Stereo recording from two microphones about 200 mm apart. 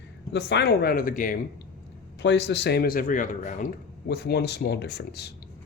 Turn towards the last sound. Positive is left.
turn(degrees=55)  # may be behind; listen again after turning